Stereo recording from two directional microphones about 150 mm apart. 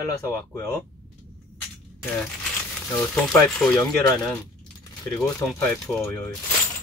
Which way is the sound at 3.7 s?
25° left (ahead or behind).